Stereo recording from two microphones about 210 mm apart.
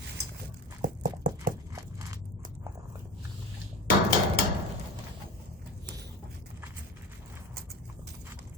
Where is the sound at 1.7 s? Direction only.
15° right (ahead or behind).